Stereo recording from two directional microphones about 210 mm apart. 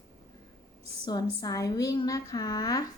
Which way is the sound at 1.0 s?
20° left (ahead or behind).